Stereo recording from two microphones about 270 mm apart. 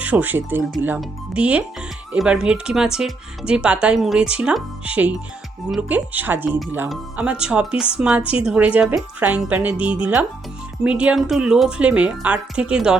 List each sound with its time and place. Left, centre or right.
0.0 s speech: centre